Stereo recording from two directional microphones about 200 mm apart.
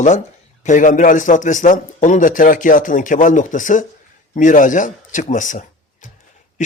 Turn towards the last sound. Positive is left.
turn(degrees=40)  # may be behind; listen again after turning